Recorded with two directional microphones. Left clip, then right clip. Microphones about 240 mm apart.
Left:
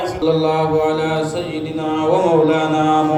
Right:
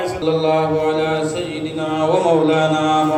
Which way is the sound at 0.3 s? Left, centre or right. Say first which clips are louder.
Even; left.